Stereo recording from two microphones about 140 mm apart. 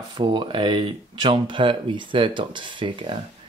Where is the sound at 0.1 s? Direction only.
35° right (ahead or behind).